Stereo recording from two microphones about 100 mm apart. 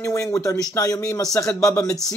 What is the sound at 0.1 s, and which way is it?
A man's voice, 30° left (ahead or behind).